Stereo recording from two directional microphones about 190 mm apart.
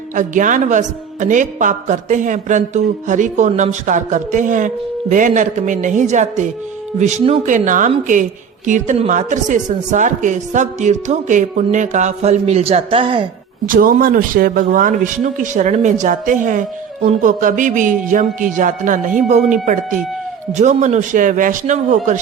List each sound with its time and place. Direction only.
0.1 s a woman's voice: 45° right (ahead or behind); by 13.2 s 25° right (ahead or behind)
13.7 s a man's voice: 45° right (ahead or behind)